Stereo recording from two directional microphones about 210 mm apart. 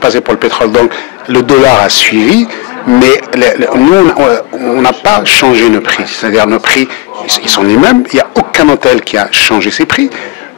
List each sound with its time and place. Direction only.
0.0 s a man's voice: 15° left (ahead or behind)